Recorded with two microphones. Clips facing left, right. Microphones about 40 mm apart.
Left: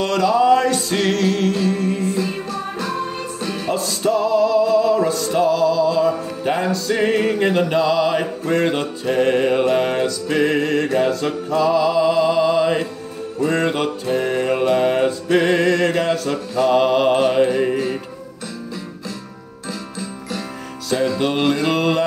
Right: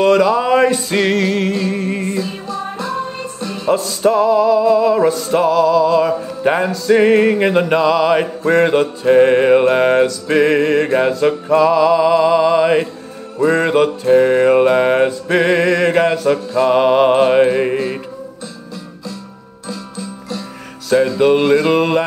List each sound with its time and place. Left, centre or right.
0.0 s music: right
2.0 s music: right
2.2 s music: left
4.1 s music: right
5.5 s music: centre
5.9 s music: right
7.5 s music: right
8.1 s music: right
19.7 s music: left
21.2 s music: right
21.6 s music: centre